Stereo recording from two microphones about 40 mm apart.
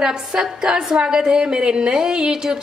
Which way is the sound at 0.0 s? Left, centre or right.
Centre.